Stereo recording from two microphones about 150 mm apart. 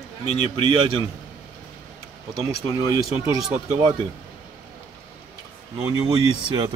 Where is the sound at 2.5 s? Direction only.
20° right (ahead or behind).